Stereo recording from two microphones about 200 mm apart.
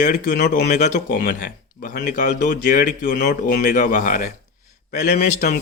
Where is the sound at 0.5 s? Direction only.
35° left (ahead or behind).